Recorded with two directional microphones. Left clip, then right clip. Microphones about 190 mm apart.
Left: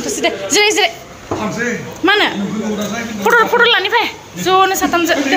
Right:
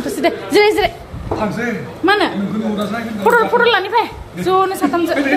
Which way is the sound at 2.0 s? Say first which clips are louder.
Left 2 dB; centre (ahead or behind).